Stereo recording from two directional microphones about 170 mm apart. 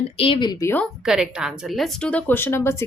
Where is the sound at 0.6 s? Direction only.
10° left (ahead or behind).